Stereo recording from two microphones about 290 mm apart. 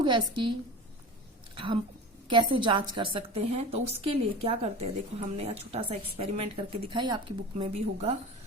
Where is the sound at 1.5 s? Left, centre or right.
Centre.